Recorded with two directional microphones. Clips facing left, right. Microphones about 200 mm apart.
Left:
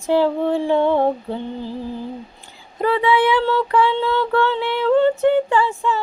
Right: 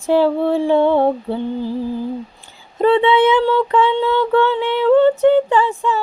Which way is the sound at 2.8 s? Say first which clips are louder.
Right 4 dB; 25° right (ahead or behind).